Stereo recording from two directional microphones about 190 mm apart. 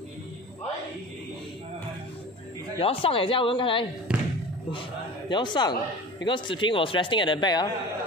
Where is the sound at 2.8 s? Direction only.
30° left (ahead or behind).